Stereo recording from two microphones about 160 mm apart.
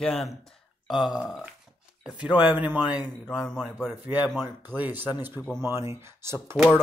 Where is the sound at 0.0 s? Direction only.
5° left (ahead or behind).